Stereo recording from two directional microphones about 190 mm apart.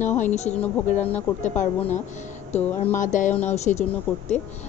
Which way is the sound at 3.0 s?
40° left (ahead or behind).